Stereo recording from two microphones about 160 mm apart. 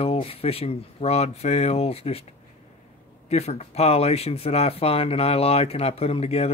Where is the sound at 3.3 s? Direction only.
40° left (ahead or behind).